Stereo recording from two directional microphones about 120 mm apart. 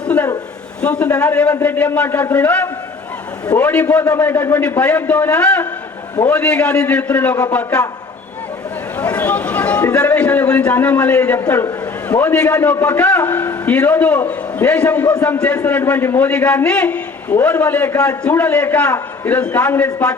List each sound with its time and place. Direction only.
0.8 s a man's voice: 10° left (ahead or behind)
9.0 s a man's voice: 15° left (ahead or behind)